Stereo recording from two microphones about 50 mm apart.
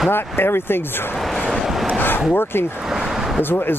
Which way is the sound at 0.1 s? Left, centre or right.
Left.